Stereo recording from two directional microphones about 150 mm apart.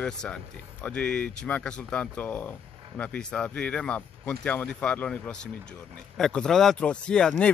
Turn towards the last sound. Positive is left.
turn(degrees=5)  # may be behind; listen again after turning